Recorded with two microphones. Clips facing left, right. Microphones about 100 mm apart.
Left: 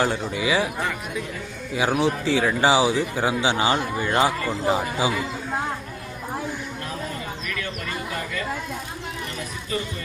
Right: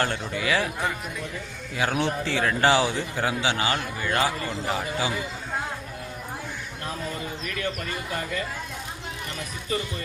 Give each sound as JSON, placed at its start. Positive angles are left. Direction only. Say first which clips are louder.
{"t": 0.0, "sound": "a man's voice", "louder": "left 3 dB", "side_deg": 10}
{"t": 1.7, "sound": "a man's voice", "louder": "left 4 dB", "side_deg": 10}
{"t": 4.4, "sound": "speech", "louder": "left 6 dB", "side_deg": 40}
{"t": 7.4, "sound": "a sound", "louder": "right 3 dB", "side_deg": -30}